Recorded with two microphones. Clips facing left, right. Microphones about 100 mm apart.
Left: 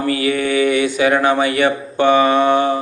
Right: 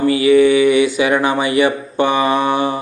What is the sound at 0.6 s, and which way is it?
Mantra, 45° left (ahead or behind).